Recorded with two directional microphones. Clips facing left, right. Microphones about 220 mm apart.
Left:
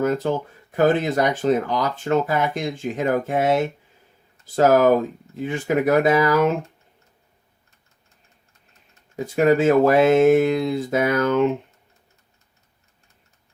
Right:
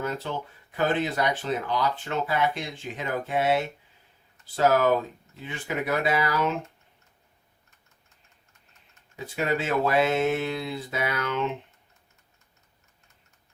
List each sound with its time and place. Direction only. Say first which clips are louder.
0.0 s speech: left 10 dB; 45° left (ahead or behind)
9.1 s speech: left 10 dB; 45° left (ahead or behind)